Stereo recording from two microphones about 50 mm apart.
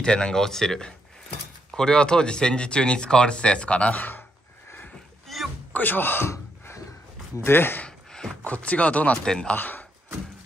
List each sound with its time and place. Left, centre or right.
0.0 s speech: centre
5.3 s a sound: centre
5.7 s speech: left
7.4 s speech: left
8.1 s a sound: centre
8.5 s speech: left
9.2 s speech: centre
9.6 s speech: left